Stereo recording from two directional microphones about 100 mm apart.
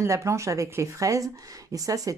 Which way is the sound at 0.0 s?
30° right (ahead or behind).